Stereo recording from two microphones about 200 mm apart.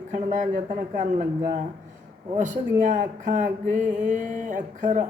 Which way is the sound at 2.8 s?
40° right (ahead or behind).